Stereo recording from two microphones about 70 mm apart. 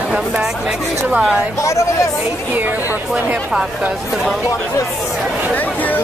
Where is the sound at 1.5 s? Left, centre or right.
Left.